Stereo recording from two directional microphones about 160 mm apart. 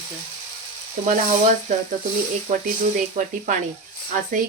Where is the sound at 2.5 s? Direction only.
50° right (ahead or behind).